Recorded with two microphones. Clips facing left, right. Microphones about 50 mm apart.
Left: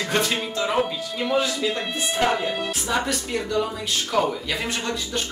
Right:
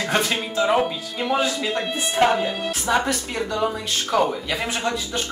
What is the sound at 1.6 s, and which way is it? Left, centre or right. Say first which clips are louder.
Speech: right 1 dB; centre.